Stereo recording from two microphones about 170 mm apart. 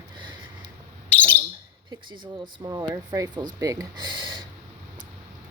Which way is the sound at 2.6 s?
25° right (ahead or behind).